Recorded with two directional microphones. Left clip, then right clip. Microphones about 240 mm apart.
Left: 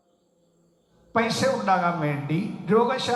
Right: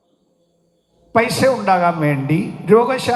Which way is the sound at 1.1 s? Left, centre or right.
Right.